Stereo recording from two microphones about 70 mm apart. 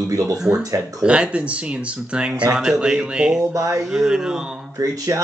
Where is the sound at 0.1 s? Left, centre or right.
Right.